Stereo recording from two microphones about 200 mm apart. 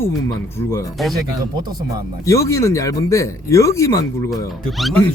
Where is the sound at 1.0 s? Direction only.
Centre (ahead or behind).